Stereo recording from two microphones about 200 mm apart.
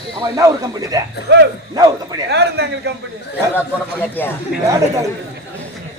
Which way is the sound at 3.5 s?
10° left (ahead or behind).